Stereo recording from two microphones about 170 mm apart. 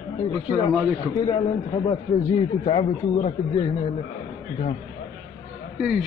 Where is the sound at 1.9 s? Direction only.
35° left (ahead or behind).